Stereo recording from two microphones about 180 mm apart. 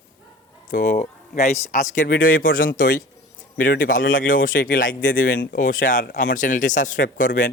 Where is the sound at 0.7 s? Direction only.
45° left (ahead or behind).